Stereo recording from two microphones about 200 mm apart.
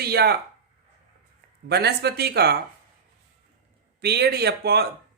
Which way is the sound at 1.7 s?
55° right (ahead or behind).